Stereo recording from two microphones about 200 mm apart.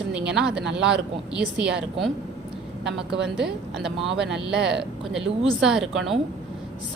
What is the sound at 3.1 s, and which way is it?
Speech, 60° right (ahead or behind).